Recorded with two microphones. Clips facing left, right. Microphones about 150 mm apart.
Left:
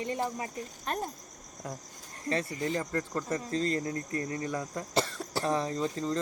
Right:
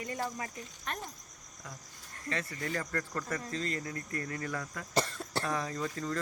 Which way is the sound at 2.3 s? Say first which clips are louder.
Left 5 dB; 25° left (ahead or behind).